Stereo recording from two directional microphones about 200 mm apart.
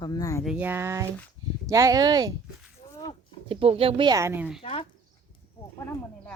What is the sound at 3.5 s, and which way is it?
Speech, 30° right (ahead or behind).